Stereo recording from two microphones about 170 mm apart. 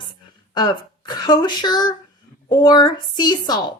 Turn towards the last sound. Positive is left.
turn(degrees=25)  # may be behind; listen again after turning